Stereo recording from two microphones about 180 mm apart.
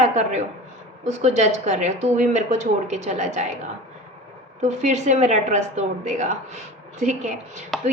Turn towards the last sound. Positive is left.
turn(degrees=0)  # may be behind; listen again after turning